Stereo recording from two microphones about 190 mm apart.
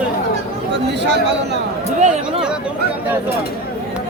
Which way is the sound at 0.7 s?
65° right (ahead or behind).